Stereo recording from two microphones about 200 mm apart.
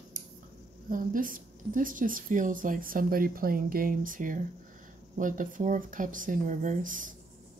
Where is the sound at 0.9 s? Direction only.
45° right (ahead or behind).